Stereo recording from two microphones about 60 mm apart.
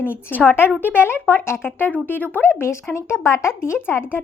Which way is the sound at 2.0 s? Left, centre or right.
Left.